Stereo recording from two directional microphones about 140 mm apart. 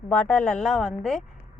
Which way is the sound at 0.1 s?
10° left (ahead or behind).